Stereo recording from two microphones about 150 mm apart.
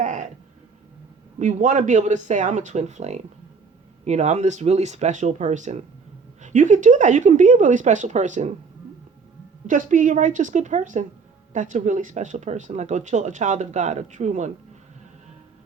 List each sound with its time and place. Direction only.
0.0 s a sound: 55° right (ahead or behind)
1.4 s a woman's voice: 55° right (ahead or behind)
9.6 s a woman's voice: 60° right (ahead or behind)